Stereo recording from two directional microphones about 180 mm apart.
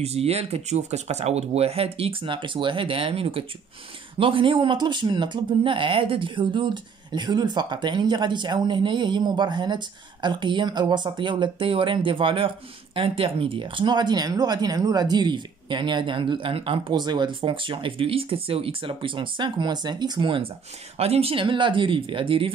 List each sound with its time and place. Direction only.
0.0 s speech: 35° right (ahead or behind)